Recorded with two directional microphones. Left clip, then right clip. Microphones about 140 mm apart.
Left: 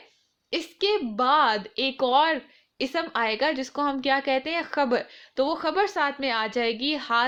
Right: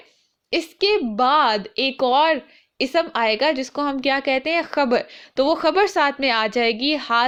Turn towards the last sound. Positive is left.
turn(degrees=-40)  # may be behind; listen again after turning